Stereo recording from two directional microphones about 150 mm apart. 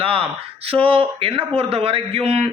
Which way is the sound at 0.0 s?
40° right (ahead or behind).